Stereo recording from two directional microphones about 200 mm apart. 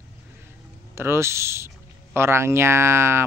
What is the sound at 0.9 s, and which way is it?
Speech, 10° right (ahead or behind).